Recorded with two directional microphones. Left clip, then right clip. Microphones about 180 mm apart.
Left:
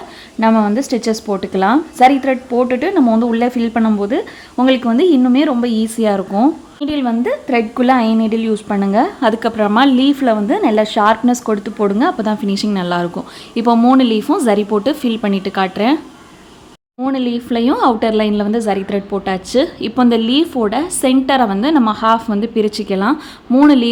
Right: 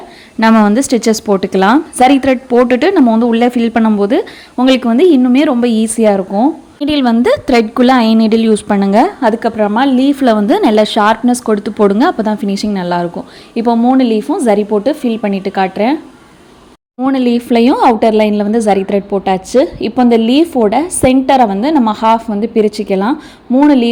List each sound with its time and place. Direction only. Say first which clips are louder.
0.3 s a woman's voice: right 4 dB; 20° right (ahead or behind)
9.3 s a woman's voice: right 2 dB; 10° right (ahead or behind)
17.0 s a woman's voice: right 6 dB; 20° right (ahead or behind)